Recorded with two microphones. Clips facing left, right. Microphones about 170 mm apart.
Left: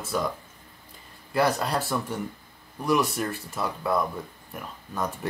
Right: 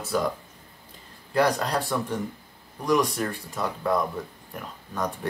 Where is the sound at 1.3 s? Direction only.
5° left (ahead or behind).